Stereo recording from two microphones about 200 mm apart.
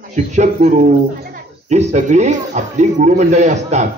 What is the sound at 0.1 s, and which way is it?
Speech, 35° right (ahead or behind).